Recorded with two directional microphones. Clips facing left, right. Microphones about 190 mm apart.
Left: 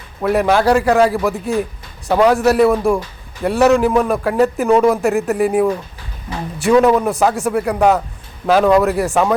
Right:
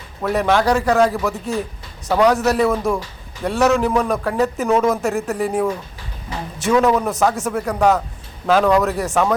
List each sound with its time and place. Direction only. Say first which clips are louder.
0.2 s a man's voice: left 3 dB; 10° left (ahead or behind)